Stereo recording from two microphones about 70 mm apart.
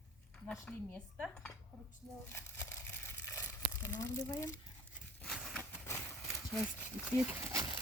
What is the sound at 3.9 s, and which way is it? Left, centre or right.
Speech, left.